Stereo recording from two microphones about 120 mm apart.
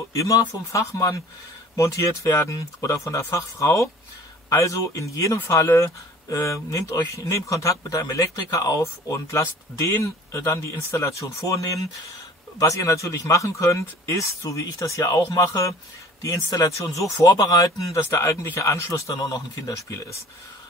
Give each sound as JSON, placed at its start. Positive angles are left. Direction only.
{"t": 0.1, "sound": "speech", "side_deg": 30}